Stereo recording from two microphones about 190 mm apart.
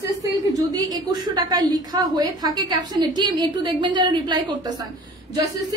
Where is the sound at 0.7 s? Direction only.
20° right (ahead or behind).